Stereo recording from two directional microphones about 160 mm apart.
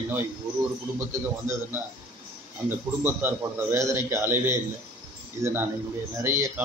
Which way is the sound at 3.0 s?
15° right (ahead or behind).